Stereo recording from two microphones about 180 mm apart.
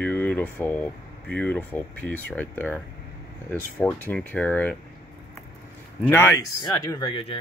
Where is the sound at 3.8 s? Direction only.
5° left (ahead or behind).